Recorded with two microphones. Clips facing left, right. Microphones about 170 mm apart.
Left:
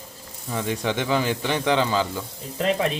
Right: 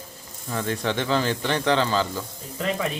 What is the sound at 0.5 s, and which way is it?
Speech, 15° left (ahead or behind).